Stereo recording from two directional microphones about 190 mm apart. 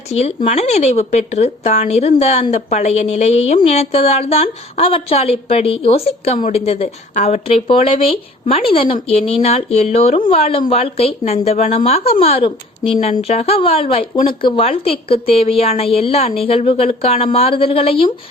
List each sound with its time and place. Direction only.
0.1 s speech: 35° left (ahead or behind)